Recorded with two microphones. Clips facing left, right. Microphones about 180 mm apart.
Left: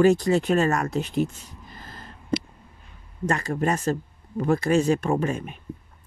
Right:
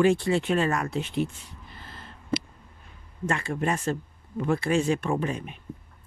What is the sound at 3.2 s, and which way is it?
Speech, 40° left (ahead or behind).